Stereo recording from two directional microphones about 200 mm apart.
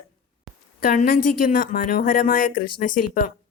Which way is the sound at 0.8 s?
45° left (ahead or behind).